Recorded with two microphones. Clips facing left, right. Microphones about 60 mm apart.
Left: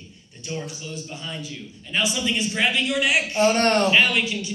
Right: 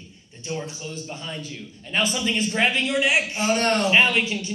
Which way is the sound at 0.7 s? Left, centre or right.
Right.